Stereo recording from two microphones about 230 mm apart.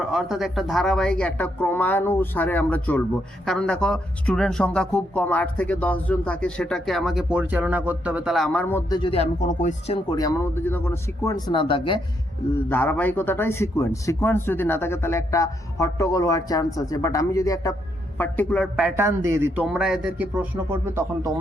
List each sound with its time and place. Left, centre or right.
0.1 s a man's voice: centre
9.0 s speech: left
12.5 s a man's voice: centre